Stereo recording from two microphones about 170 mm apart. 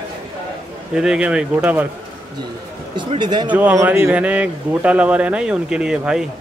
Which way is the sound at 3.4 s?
10° right (ahead or behind).